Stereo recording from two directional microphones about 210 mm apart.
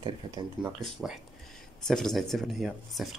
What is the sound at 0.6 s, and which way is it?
Speech, 5° right (ahead or behind).